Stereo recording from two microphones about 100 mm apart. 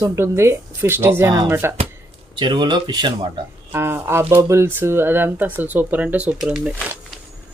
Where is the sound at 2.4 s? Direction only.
50° right (ahead or behind).